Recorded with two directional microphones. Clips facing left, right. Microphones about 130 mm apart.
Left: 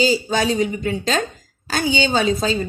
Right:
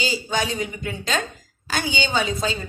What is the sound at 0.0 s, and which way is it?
A woman's voice, 35° left (ahead or behind).